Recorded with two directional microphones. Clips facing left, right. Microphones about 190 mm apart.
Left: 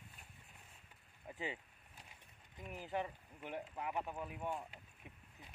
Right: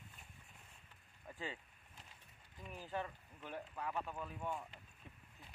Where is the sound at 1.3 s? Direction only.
20° left (ahead or behind).